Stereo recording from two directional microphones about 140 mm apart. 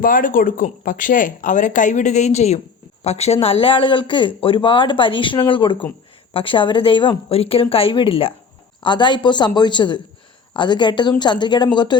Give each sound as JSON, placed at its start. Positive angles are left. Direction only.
{"t": 0.0, "sound": "speech", "side_deg": 75}